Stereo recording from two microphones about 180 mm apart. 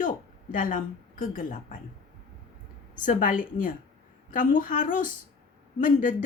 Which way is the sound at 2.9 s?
45° left (ahead or behind).